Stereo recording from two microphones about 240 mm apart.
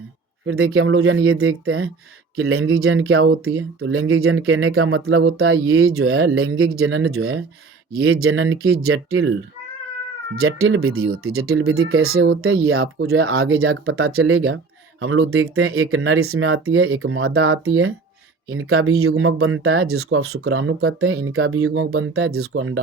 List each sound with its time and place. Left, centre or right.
0.4 s speech: right
10.4 s speech: right